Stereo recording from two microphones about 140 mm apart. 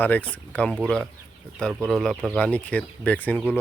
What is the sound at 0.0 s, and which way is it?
Speech, 10° left (ahead or behind).